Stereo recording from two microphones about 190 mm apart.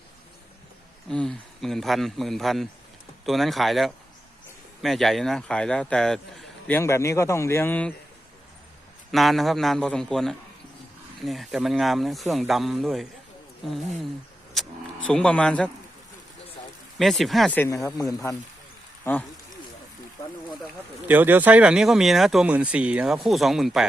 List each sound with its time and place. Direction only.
1.1 s speech: 5° left (ahead or behind)
9.1 s speech: centre (ahead or behind)
14.5 s speech: 5° left (ahead or behind)
17.0 s speech: centre (ahead or behind); by 18.3 s 15° left (ahead or behind)
21.1 s speech: 10° right (ahead or behind)